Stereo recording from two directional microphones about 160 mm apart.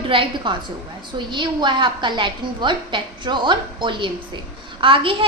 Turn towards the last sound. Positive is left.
turn(degrees=-35)  # may be behind; listen again after turning